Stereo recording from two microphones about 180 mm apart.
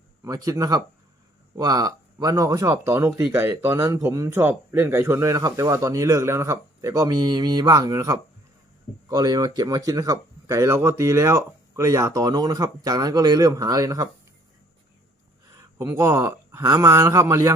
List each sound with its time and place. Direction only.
0.3 s speech: 20° right (ahead or behind)
15.8 s speech: 15° right (ahead or behind)